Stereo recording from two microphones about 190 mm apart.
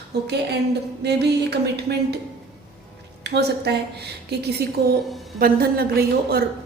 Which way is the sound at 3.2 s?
60° right (ahead or behind).